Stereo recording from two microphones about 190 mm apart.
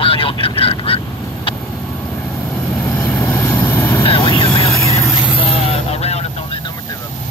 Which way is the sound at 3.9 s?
25° left (ahead or behind).